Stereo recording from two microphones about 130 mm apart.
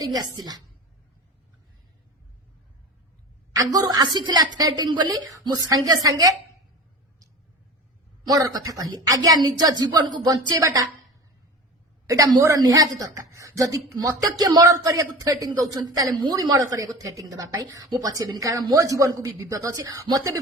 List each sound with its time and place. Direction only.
0.0 s a woman's voice: 30° right (ahead or behind)
3.5 s a woman's voice: 30° right (ahead or behind)
8.3 s speech: 25° right (ahead or behind)
12.0 s a woman's voice: 25° right (ahead or behind)